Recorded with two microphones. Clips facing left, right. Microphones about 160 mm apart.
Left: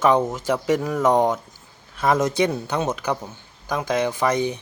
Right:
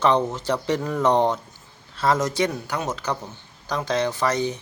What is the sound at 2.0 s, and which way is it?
Speech, 20° left (ahead or behind).